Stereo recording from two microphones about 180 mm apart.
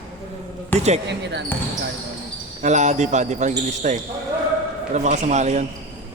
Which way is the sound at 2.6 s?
40° right (ahead or behind).